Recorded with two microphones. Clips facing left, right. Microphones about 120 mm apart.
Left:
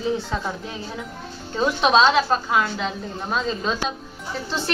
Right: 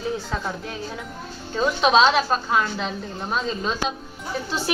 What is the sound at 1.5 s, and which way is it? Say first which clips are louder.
A woman's voice: even; centre (ahead or behind).